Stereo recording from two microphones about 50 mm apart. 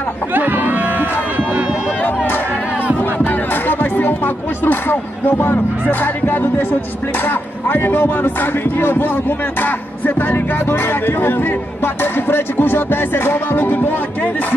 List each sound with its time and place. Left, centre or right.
0.3 s a sound: right
2.0 s chatter: left
3.0 s music: left
5.3 s speech: left